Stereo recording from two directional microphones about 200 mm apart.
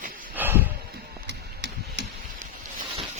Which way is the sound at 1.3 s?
60° right (ahead or behind).